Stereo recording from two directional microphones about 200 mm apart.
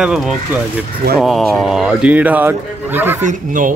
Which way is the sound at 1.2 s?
Centre (ahead or behind).